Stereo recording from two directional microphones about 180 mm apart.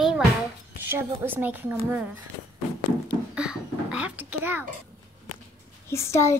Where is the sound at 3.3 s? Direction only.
5° right (ahead or behind).